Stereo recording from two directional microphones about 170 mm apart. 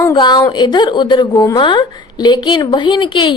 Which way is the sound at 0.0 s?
25° left (ahead or behind).